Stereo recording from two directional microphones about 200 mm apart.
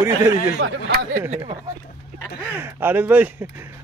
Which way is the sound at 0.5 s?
60° right (ahead or behind).